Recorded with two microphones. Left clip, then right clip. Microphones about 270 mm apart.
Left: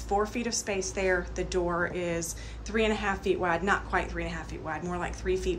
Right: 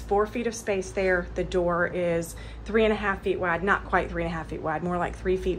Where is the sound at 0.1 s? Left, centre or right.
Centre.